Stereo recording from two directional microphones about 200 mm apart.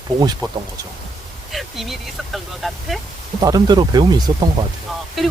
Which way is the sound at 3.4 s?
20° right (ahead or behind).